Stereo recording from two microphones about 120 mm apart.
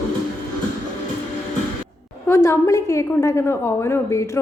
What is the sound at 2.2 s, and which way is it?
A woman's voice, 20° left (ahead or behind).